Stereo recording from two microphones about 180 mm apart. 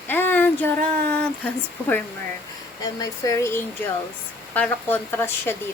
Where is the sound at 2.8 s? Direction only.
20° left (ahead or behind).